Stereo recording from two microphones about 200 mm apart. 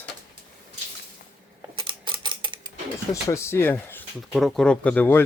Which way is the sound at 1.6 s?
25° right (ahead or behind).